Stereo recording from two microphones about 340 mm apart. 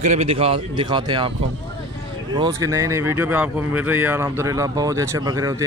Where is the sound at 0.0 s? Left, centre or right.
Centre.